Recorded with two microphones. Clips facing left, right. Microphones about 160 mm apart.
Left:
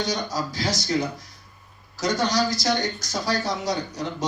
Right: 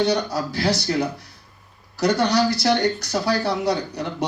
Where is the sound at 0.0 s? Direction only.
65° right (ahead or behind).